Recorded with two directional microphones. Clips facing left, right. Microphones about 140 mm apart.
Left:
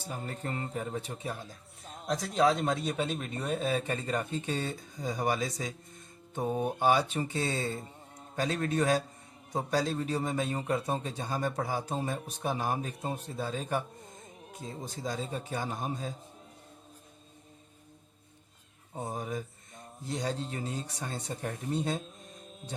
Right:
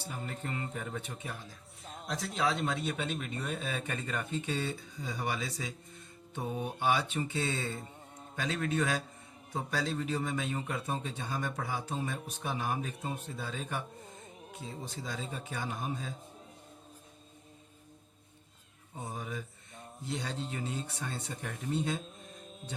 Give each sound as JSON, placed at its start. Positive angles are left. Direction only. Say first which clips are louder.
{"t": 0.0, "sound": "a man's voice", "louder": "left 2 dB", "side_deg": 40}
{"t": 1.8, "sound": "a sound", "louder": "even", "side_deg": 0}
{"t": 2.0, "sound": "a man's voice", "louder": "left 6 dB", "side_deg": 40}
{"t": 19.1, "sound": "mantra", "louder": "left 4 dB", "side_deg": 40}
{"t": 20.1, "sound": "a man's voice", "louder": "left 4 dB", "side_deg": 40}
{"t": 22.0, "sound": "mantra", "louder": "even", "side_deg": 0}